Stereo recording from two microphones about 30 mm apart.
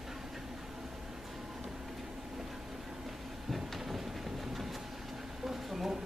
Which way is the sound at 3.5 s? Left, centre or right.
Centre.